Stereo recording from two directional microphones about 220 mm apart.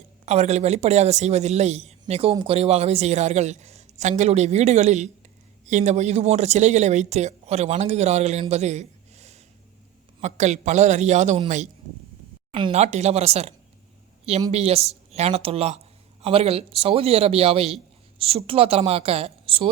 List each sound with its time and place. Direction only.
0.3 s a man's voice: 30° right (ahead or behind)
14.5 s a man's voice: 30° right (ahead or behind)